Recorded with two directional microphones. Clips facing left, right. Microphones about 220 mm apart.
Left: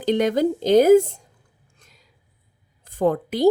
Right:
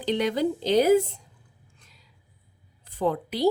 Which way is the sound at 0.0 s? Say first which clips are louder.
Left 5 dB; 45° left (ahead or behind).